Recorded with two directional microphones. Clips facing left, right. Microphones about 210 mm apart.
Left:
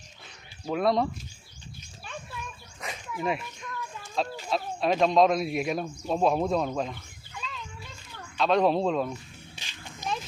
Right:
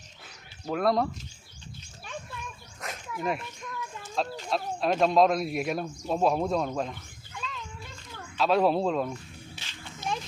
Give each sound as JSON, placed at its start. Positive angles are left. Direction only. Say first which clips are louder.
{"t": 0.6, "sound": "speech", "louder": "left 1 dB", "side_deg": 0}
{"t": 2.8, "sound": "speech", "louder": "left 1 dB", "side_deg": 0}
{"t": 8.4, "sound": "speech", "louder": "even", "side_deg": -5}
{"t": 9.6, "sound": "a sound", "louder": "left 3 dB", "side_deg": 15}